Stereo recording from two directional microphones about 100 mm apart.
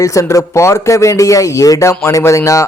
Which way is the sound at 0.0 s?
30° left (ahead or behind).